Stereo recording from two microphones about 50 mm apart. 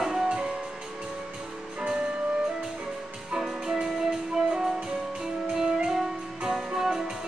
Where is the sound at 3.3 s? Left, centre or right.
Centre.